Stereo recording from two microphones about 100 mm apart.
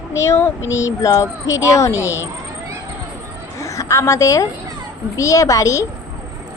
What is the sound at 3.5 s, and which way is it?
A woman's voice, 30° left (ahead or behind).